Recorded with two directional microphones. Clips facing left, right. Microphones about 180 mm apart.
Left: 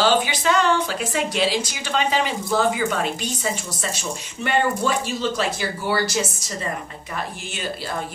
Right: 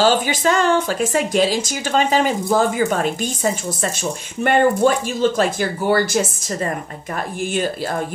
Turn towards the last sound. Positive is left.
turn(degrees=-50)  # may be behind; listen again after turning